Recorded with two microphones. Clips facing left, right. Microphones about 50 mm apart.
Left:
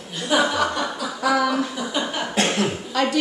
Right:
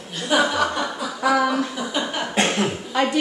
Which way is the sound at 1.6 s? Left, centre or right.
Centre.